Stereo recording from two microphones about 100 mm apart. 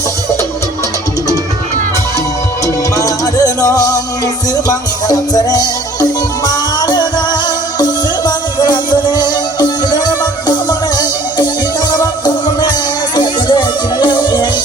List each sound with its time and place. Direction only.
2.9 s music: 35° left (ahead or behind)
5.0 s music: 40° left (ahead or behind)